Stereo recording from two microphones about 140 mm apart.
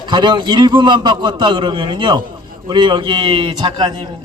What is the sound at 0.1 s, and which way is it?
A man's voice, 35° right (ahead or behind).